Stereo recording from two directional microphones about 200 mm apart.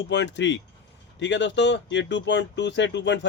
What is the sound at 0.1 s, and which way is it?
Speech, 60° left (ahead or behind).